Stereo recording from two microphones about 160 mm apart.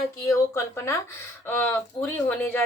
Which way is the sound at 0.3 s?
20° left (ahead or behind).